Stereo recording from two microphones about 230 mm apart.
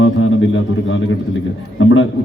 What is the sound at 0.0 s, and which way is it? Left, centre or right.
Music, left.